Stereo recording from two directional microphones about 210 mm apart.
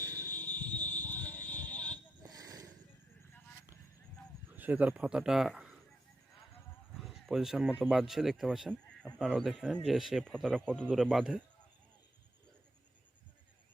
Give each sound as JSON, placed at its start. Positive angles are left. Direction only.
{"t": 0.3, "sound": "fire alarm", "side_deg": 10}
{"t": 2.2, "sound": "a sound", "side_deg": -15}
{"t": 4.5, "sound": "speech", "side_deg": -10}
{"t": 6.9, "sound": "speech", "side_deg": 0}